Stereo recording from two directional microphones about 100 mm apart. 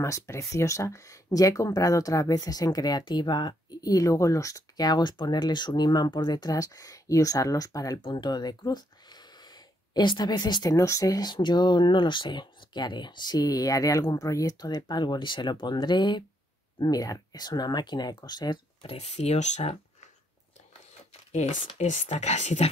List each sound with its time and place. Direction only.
0.0 s speech: 30° left (ahead or behind)
8.0 s speech: 50° left (ahead or behind)
10.7 s speech: 30° left (ahead or behind); by 19.8 s 90° left
21.8 s speech: 90° left